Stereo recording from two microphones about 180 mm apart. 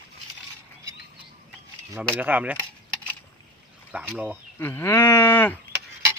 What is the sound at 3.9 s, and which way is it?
Speech, 10° right (ahead or behind).